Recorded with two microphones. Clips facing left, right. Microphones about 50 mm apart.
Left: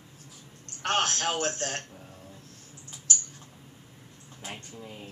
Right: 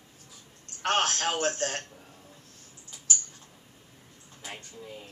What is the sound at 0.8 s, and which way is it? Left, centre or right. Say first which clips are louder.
Speech: right 1 dB; centre.